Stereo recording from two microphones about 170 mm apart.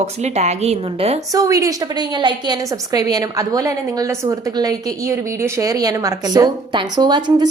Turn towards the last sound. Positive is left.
turn(degrees=-25)  # may be behind; listen again after turning